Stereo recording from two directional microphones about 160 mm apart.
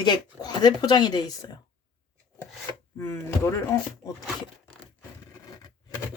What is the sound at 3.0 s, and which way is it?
Speech, 15° left (ahead or behind).